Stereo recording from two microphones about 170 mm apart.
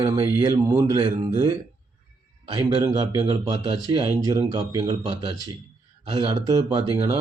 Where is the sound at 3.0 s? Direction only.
35° right (ahead or behind).